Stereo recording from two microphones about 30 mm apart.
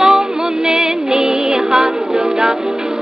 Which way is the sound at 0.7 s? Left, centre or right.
Right.